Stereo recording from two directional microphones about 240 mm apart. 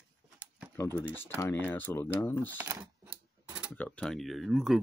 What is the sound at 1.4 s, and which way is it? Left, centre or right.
Speech, centre.